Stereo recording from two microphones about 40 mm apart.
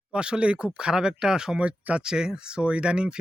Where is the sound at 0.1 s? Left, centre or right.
Right.